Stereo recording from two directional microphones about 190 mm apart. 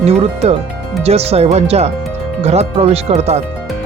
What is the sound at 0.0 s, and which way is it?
Speech, 35° right (ahead or behind).